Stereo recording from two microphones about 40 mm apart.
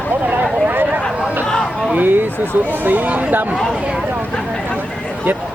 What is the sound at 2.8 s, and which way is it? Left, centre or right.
Speech, right.